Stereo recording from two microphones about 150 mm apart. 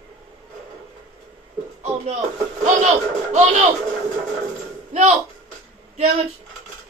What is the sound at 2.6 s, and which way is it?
Speech, 50° right (ahead or behind).